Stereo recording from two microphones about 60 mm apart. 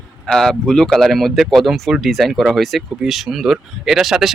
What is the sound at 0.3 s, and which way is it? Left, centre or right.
Speech, centre.